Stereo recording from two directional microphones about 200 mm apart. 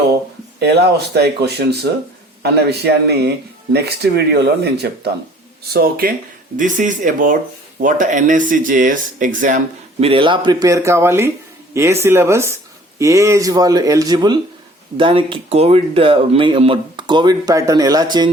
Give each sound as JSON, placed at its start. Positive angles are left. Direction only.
{"t": 0.6, "sound": "speech", "side_deg": -55}
{"t": 10.0, "sound": "speech", "side_deg": -25}